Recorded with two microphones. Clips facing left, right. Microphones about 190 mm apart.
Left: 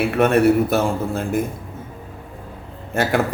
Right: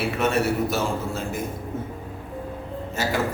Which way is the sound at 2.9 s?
60° left (ahead or behind).